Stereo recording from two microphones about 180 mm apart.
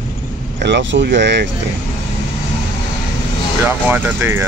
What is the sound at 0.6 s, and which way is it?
Speech, 75° right (ahead or behind).